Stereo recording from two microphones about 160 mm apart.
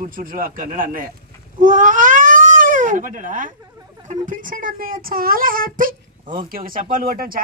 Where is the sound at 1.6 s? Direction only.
55° right (ahead or behind).